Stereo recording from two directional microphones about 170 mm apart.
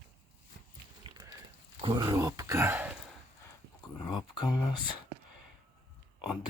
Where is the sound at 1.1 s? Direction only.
30° right (ahead or behind).